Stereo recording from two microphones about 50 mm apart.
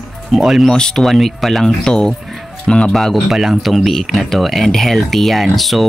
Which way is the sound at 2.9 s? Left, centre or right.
Centre.